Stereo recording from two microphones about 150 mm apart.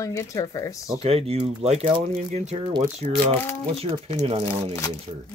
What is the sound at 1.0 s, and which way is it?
Speech, 40° right (ahead or behind).